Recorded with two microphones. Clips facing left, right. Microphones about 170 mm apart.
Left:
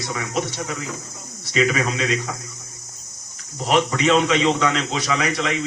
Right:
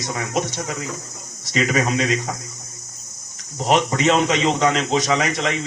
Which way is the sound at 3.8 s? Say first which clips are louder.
Even; 40° right (ahead or behind).